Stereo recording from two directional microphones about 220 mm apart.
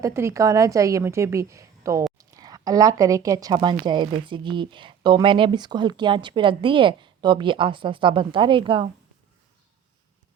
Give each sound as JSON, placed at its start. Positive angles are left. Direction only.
{"t": 0.0, "sound": "a woman's voice", "side_deg": -10}